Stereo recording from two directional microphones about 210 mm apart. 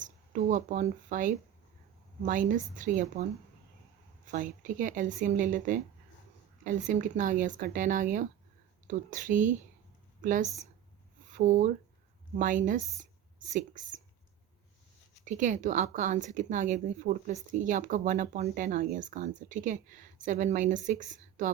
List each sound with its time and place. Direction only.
0.0 s speech: 35° right (ahead or behind)
4.3 s speech: 40° right (ahead or behind)
15.2 s a woman's voice: 35° right (ahead or behind)